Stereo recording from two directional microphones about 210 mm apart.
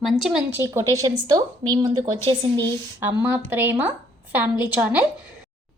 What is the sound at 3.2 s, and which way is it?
A woman's voice, 10° right (ahead or behind).